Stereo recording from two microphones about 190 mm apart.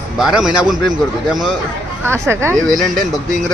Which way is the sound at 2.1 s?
15° right (ahead or behind).